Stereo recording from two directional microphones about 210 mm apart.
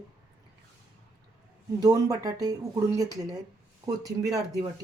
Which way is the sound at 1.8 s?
15° right (ahead or behind).